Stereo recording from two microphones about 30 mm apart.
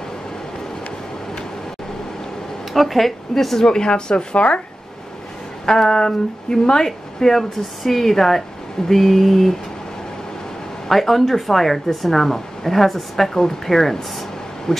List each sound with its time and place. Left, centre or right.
2.7 s speech: centre
3.6 s speech: left
5.7 s speech: left
7.2 s speech: centre
10.9 s speech: centre; by 14.8 s left